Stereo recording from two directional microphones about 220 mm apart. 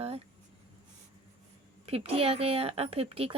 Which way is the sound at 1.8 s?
25° right (ahead or behind).